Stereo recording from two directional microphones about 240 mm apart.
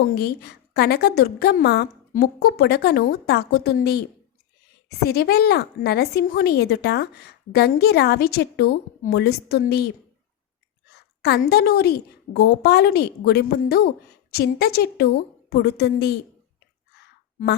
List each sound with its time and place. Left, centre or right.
0.1 s a woman's voice: left
11.2 s a woman's voice: left